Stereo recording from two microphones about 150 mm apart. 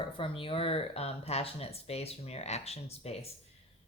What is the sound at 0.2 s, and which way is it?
Speech, 35° left (ahead or behind).